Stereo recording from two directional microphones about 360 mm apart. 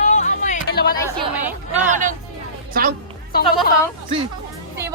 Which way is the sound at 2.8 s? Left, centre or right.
Right.